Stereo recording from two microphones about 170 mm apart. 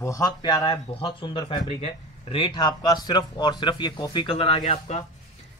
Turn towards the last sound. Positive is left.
turn(degrees=40)  # may be behind; listen again after turning